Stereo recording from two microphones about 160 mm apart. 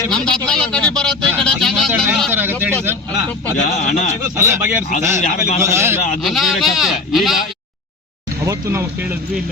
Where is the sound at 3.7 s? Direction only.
45° left (ahead or behind).